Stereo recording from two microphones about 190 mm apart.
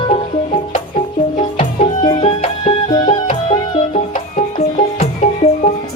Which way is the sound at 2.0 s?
30° left (ahead or behind).